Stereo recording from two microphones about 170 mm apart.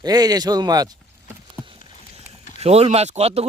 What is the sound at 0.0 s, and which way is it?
Speech, 25° right (ahead or behind).